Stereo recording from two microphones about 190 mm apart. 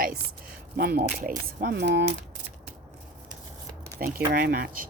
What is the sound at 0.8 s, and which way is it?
Speech, 55° right (ahead or behind).